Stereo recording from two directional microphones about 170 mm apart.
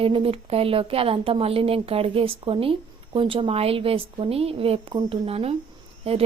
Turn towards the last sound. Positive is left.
turn(degrees=-35)  # may be behind; listen again after turning